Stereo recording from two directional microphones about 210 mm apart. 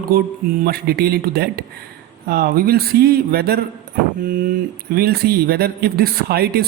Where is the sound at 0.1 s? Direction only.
45° right (ahead or behind).